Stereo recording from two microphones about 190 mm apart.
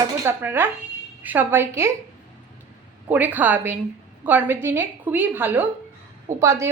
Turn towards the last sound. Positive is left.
turn(degrees=-15)  # may be behind; listen again after turning